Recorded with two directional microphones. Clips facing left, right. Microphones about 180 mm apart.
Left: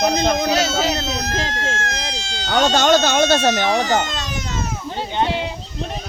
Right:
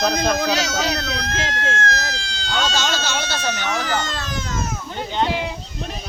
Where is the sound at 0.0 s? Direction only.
20° left (ahead or behind).